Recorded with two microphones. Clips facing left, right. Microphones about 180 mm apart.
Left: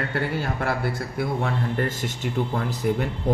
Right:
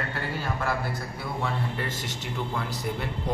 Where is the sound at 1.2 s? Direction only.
55° left (ahead or behind).